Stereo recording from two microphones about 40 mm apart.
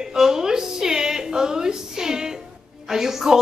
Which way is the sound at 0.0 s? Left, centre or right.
Centre.